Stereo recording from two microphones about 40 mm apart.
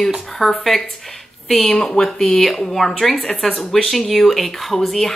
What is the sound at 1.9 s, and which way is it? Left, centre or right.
A woman's voice, centre.